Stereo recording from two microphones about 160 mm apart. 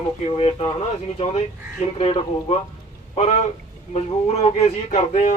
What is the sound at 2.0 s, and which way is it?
Speech, 35° left (ahead or behind).